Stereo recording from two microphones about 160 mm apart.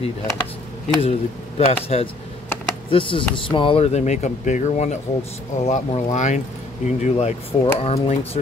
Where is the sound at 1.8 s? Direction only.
40° left (ahead or behind).